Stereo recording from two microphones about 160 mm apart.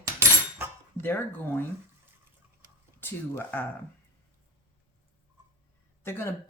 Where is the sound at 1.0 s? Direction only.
15° left (ahead or behind).